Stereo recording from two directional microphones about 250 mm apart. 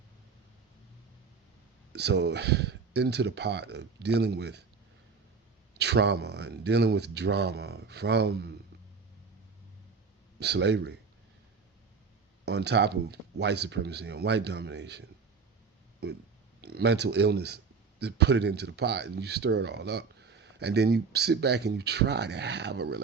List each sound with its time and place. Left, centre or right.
1.9 s speech: right
5.7 s speech: right
10.4 s speech: right
12.5 s speech: right
16.6 s speech: right